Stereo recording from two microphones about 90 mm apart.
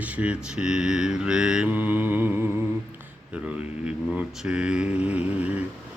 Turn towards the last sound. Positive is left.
turn(degrees=-15)  # may be behind; listen again after turning